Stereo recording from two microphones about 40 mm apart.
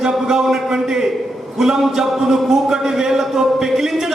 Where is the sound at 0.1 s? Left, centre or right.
Centre.